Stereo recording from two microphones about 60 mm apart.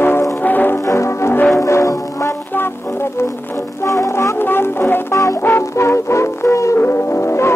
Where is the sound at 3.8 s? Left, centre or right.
Left.